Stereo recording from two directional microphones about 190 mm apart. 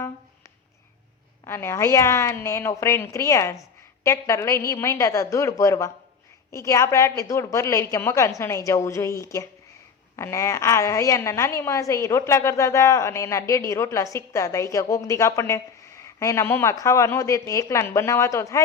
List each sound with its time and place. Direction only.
1.5 s a woman's voice: 15° left (ahead or behind)